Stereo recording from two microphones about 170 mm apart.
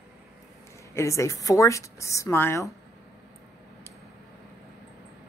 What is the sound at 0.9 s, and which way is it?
A woman's voice, 15° left (ahead or behind).